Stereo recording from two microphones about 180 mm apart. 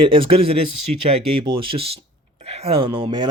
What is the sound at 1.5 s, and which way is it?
Speech, 30° right (ahead or behind).